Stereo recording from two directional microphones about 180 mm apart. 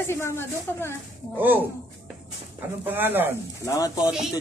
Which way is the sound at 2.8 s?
10° right (ahead or behind).